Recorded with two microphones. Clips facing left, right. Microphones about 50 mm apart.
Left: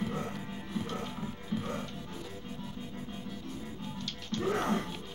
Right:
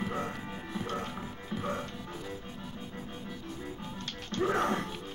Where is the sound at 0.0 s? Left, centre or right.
Right.